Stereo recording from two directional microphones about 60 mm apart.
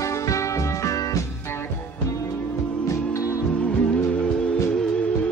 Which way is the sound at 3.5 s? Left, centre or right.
Left.